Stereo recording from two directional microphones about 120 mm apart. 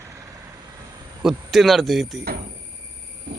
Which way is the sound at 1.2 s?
Centre (ahead or behind).